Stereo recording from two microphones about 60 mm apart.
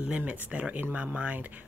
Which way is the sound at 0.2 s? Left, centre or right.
Right.